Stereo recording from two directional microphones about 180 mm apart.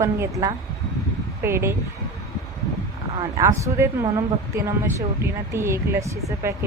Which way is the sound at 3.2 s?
20° right (ahead or behind).